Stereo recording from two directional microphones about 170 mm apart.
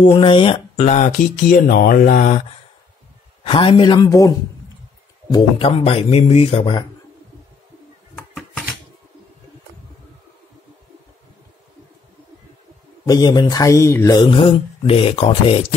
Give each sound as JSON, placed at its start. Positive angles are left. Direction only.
{"t": 0.0, "sound": "speech", "side_deg": 30}
{"t": 0.7, "sound": "speech", "side_deg": 45}
{"t": 3.4, "sound": "speech", "side_deg": 30}
{"t": 5.3, "sound": "speech", "side_deg": 35}
{"t": 8.4, "sound": "a sound", "side_deg": 5}
{"t": 13.0, "sound": "speech", "side_deg": 25}